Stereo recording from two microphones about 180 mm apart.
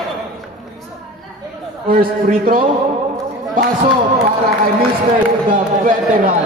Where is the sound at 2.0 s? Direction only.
50° right (ahead or behind).